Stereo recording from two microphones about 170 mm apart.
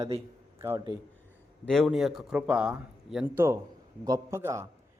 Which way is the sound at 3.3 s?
15° right (ahead or behind).